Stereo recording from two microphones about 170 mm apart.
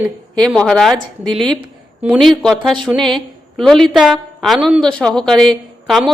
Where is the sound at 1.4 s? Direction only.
30° right (ahead or behind).